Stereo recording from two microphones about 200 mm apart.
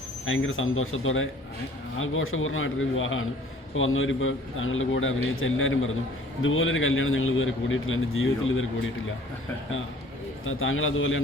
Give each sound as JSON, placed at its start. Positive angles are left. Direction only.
{"t": 0.3, "sound": "a man's voice", "side_deg": 80}
{"t": 10.4, "sound": "a man's voice", "side_deg": 85}